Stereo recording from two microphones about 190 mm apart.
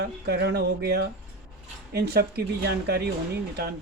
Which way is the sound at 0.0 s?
60° right (ahead or behind).